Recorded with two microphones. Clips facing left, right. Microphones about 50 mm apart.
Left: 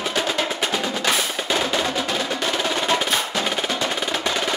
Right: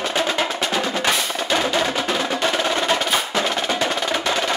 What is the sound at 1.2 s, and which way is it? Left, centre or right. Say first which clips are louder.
Percussion: right 1 dB; centre.